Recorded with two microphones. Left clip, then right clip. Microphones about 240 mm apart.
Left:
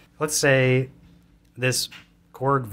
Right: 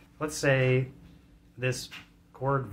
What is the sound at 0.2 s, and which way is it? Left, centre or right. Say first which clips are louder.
Speech: left 7 dB; left.